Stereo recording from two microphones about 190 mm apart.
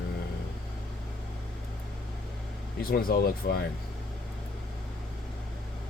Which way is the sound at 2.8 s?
50° left (ahead or behind).